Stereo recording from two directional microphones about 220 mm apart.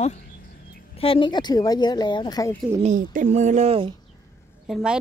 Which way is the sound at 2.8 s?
35° right (ahead or behind).